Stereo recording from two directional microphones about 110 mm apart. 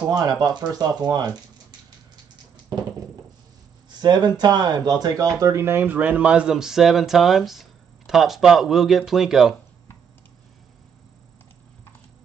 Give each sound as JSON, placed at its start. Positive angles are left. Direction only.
{"t": 0.1, "sound": "speech", "side_deg": -35}
{"t": 4.0, "sound": "speech", "side_deg": -40}